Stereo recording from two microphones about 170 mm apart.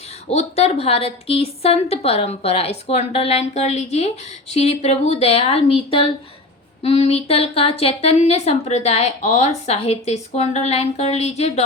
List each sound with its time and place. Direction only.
0.3 s a woman's voice: 35° left (ahead or behind)